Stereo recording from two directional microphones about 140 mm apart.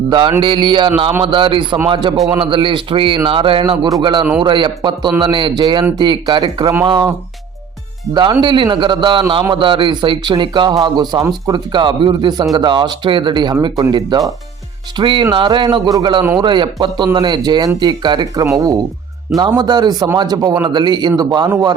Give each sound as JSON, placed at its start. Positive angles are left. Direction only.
{"t": 0.1, "sound": "speech", "side_deg": -35}
{"t": 8.1, "sound": "a man's voice", "side_deg": -30}